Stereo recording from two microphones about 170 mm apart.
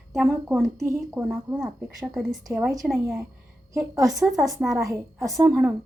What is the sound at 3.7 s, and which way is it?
Speech, 20° right (ahead or behind).